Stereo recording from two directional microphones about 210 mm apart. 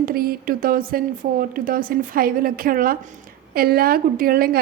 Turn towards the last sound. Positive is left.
turn(degrees=-45)  # may be behind; listen again after turning